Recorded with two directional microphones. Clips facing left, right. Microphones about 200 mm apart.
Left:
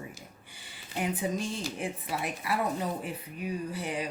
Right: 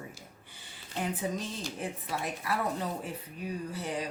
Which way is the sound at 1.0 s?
10° left (ahead or behind).